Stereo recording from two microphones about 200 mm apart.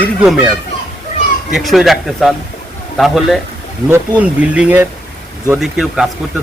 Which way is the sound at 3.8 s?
10° right (ahead or behind).